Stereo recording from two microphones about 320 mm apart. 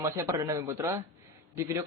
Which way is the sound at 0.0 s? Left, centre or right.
Centre.